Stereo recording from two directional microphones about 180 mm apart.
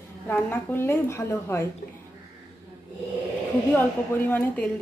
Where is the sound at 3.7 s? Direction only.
10° left (ahead or behind).